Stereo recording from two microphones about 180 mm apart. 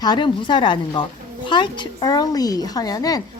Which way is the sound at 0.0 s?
25° left (ahead or behind).